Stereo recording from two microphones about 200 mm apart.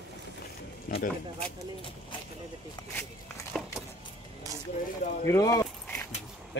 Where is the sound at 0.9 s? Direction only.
45° left (ahead or behind).